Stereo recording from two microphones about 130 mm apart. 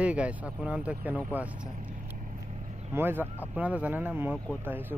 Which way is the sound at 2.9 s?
15° right (ahead or behind).